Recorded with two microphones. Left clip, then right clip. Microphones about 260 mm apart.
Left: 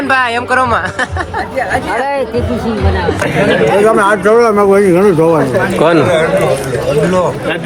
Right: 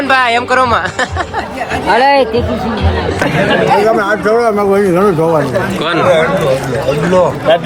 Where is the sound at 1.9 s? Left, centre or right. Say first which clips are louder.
Right 6 dB; right.